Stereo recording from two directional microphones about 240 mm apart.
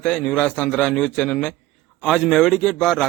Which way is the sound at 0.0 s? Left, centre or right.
Centre.